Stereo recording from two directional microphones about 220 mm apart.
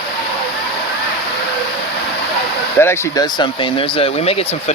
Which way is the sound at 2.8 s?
15° left (ahead or behind).